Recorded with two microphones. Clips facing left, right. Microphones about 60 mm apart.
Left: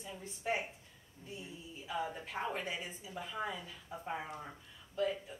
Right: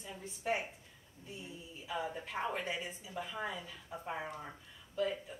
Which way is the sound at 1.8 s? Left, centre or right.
Centre.